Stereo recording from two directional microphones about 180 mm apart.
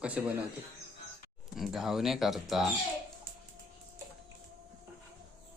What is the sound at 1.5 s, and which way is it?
Speech, centre (ahead or behind).